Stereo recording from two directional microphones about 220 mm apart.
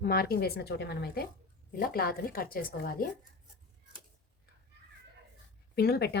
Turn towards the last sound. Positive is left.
turn(degrees=50)  # may be behind; listen again after turning